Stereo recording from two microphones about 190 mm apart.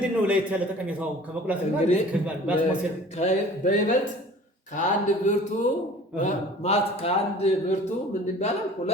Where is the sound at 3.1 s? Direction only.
40° left (ahead or behind).